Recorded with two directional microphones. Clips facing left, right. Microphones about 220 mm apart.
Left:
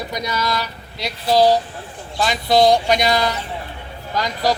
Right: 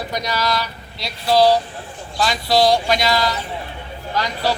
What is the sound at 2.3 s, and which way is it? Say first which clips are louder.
Speech: left 2 dB; 20° left (ahead or behind).